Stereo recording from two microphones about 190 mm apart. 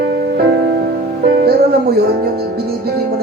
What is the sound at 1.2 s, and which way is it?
Music, 55° right (ahead or behind).